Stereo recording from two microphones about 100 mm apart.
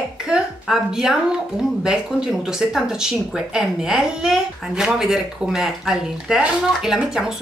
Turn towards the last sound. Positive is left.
turn(degrees=-5)  # may be behind; listen again after turning